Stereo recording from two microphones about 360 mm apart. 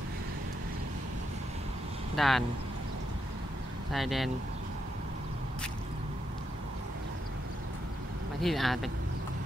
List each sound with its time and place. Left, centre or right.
2.1 s speech: centre
3.9 s speech: centre
8.4 s speech: centre